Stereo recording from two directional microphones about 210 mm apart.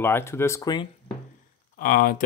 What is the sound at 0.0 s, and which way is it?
Speech, 10° left (ahead or behind).